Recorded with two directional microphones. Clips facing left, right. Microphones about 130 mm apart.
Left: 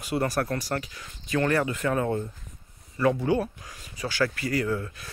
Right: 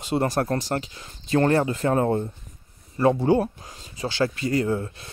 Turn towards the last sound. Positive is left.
turn(degrees=-25)  # may be behind; listen again after turning